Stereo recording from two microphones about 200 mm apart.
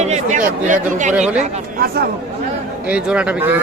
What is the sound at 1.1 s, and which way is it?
Speech, 5° right (ahead or behind).